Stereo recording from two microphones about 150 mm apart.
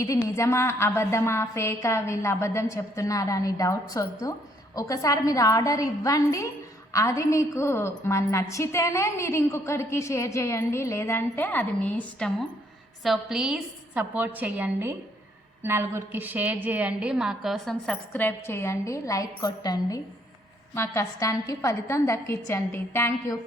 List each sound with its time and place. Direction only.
0.0 s a woman's voice: 20° left (ahead or behind)
13.0 s a woman's voice: centre (ahead or behind); by 23.3 s 15° left (ahead or behind)